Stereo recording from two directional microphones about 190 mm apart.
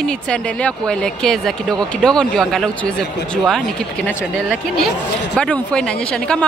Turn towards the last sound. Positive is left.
turn(degrees=5)  # may be behind; listen again after turning